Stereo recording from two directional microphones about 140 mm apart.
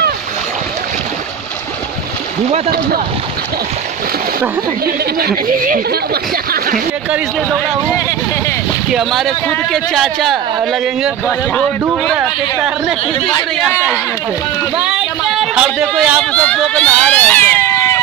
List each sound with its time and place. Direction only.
4.8 s speech: 90° right
8.9 s a man's voice: centre (ahead or behind)
14.8 s a sound: 5° right (ahead or behind)
15.5 s a man's voice: 5° right (ahead or behind)
16.3 s speech: 10° left (ahead or behind)